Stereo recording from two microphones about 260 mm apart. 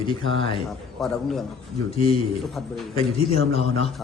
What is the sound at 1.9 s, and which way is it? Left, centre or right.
A man's voice, left.